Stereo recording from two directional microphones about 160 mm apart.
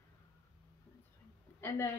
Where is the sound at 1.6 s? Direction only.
15° left (ahead or behind).